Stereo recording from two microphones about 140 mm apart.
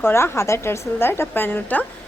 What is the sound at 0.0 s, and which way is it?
Speech, 20° left (ahead or behind).